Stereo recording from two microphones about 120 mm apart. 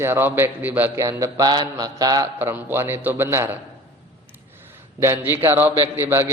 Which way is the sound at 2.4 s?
20° right (ahead or behind).